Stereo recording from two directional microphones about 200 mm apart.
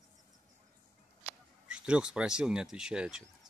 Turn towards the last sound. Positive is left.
turn(degrees=-5)  # may be behind; listen again after turning